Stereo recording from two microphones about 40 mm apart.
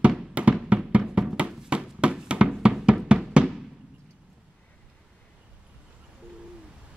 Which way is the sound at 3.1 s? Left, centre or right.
Right.